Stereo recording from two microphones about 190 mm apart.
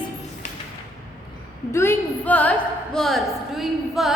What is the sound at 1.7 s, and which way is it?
A woman's voice, 15° left (ahead or behind).